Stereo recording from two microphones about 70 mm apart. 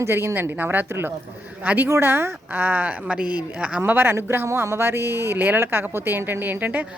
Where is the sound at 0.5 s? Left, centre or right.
Right.